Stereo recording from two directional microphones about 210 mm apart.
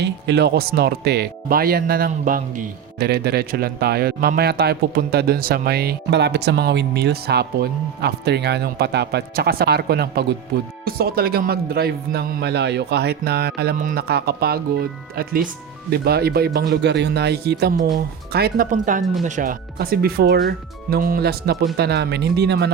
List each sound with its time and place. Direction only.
0.0 s speech: 50° right (ahead or behind)